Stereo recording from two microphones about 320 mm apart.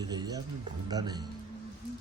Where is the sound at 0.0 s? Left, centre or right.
Centre.